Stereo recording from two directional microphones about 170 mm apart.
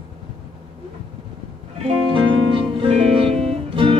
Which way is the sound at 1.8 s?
30° right (ahead or behind).